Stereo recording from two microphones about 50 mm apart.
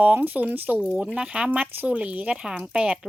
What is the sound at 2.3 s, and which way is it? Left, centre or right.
Speech, centre.